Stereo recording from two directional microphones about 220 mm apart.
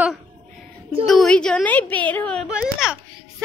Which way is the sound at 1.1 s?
Centre (ahead or behind).